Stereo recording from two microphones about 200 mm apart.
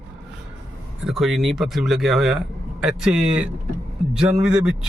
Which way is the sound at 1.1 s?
Centre (ahead or behind).